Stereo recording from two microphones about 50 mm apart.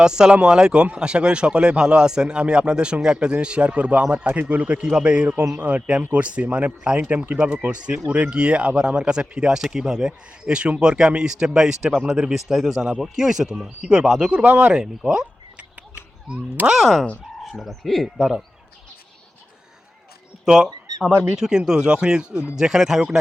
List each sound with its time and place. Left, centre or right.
0.0 s speech: centre; by 4.8 s right
4.8 s speech: centre
14.3 s speech: right
14.8 s speech: centre
16.7 s speech: centre
20.4 s speech: centre